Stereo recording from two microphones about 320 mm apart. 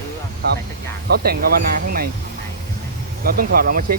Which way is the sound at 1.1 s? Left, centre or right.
Right.